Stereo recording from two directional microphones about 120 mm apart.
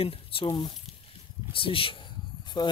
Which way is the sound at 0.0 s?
50° left (ahead or behind).